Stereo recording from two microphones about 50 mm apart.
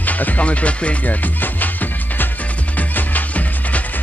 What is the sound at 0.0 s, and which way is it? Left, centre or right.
Music, left.